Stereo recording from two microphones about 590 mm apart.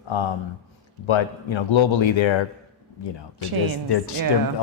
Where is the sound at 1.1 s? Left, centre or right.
Left.